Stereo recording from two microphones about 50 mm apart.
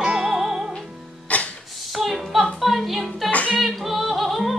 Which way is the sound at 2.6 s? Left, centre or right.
Centre.